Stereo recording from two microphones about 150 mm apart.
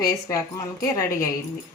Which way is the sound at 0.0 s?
20° left (ahead or behind).